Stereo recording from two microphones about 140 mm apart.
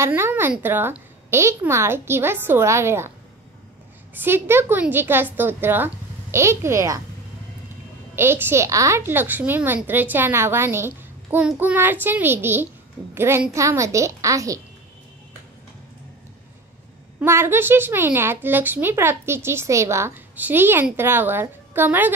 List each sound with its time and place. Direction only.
0.0 s speech: 15° right (ahead or behind)
4.1 s a woman's voice: 15° right (ahead or behind)
8.2 s a woman's voice: 15° right (ahead or behind)
17.2 s speech: 15° right (ahead or behind)